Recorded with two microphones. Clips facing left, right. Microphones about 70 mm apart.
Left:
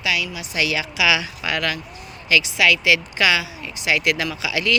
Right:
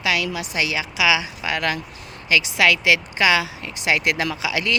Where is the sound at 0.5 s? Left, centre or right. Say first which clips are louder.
Left 4 dB; right.